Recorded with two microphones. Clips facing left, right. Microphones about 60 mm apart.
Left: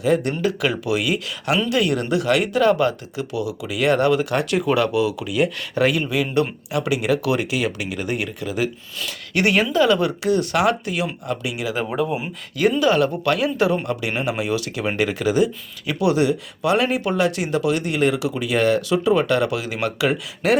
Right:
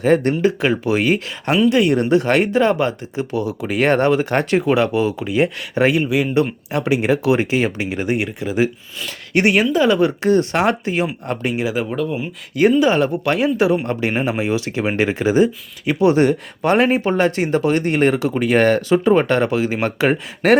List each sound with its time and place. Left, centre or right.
0.0 s speech: right
0.4 s speech: right
10.2 s speech: right
11.9 s speech: centre
12.8 s speech: right
16.2 s speech: right